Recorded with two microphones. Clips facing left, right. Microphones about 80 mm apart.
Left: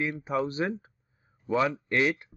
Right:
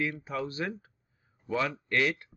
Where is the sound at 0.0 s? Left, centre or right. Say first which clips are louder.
Left 4 dB; left.